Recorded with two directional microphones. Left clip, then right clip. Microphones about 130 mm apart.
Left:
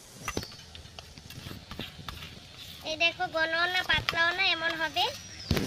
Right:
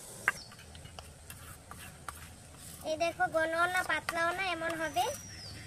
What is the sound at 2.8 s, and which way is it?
Speech, 15° right (ahead or behind).